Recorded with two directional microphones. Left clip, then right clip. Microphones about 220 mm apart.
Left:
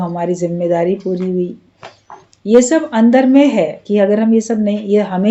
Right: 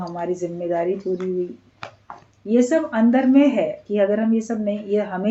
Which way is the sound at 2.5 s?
40° left (ahead or behind).